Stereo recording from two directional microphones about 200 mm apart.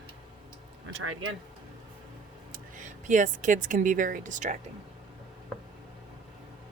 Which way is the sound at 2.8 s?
40° right (ahead or behind).